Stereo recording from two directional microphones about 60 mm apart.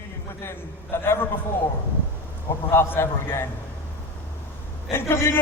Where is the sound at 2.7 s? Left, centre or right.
Left.